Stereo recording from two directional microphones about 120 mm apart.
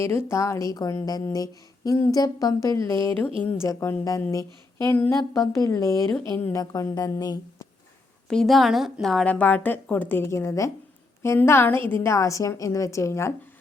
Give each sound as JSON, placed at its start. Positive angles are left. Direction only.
{"t": 0.0, "sound": "a woman's voice", "side_deg": 20}
{"t": 6.3, "sound": "a woman's voice", "side_deg": 15}
{"t": 6.6, "sound": "speech", "side_deg": 30}
{"t": 8.3, "sound": "a woman's voice", "side_deg": 0}